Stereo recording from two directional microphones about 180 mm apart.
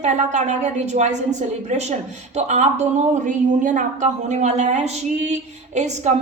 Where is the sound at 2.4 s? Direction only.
40° right (ahead or behind).